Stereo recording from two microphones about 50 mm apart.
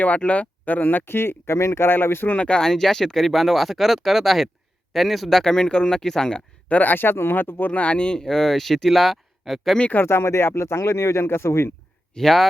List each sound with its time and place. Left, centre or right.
0.0 s speech: left
1.0 s speech: left
2.3 s speech: left
2.6 s speech: centre
6.7 s speech: left
7.7 s speech: left
8.2 s speech: centre
9.7 s speech: left
10.0 s speech: left
12.1 s speech: centre